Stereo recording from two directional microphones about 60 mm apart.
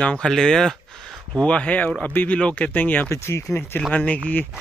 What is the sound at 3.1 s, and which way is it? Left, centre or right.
Speech, left.